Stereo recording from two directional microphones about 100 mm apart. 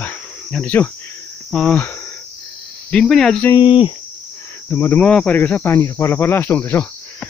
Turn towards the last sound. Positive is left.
turn(degrees=20)  # may be behind; listen again after turning